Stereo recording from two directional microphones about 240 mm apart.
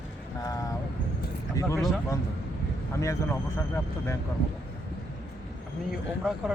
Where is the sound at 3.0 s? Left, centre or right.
Centre.